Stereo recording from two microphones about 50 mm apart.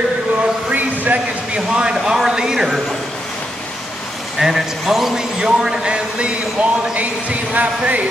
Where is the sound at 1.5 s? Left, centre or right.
Centre.